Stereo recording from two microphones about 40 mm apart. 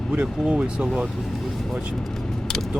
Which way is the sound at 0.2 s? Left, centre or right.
Right.